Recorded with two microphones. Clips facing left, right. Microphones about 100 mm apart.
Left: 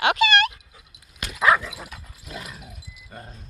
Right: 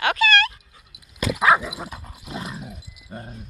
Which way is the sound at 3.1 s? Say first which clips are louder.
Right 5 dB; 20° right (ahead or behind).